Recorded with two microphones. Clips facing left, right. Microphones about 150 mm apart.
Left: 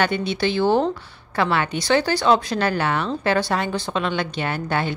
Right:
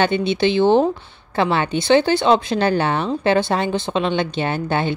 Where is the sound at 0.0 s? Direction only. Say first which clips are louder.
Right 4 dB; 25° right (ahead or behind).